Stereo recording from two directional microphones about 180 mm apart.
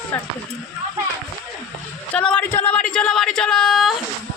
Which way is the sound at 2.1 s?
5° left (ahead or behind).